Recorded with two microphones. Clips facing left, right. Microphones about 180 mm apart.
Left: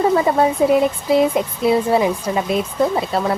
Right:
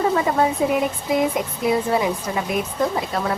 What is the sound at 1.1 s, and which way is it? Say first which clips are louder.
Speech: left 5 dB; 30° left (ahead or behind).